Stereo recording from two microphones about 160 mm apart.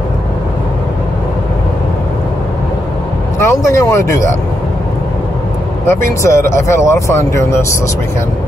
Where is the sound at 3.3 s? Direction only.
20° left (ahead or behind).